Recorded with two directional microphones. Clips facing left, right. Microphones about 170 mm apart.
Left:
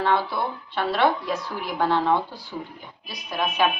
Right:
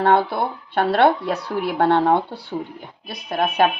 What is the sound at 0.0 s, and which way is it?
Speech, 55° right (ahead or behind).